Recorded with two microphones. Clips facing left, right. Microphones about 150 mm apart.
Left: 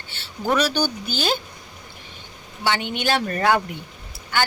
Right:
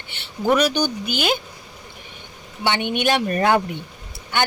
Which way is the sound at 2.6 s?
20° right (ahead or behind).